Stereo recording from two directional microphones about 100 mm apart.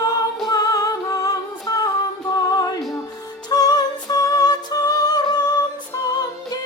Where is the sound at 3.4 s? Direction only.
40° left (ahead or behind).